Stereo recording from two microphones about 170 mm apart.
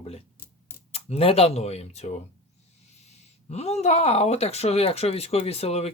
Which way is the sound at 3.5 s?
40° left (ahead or behind).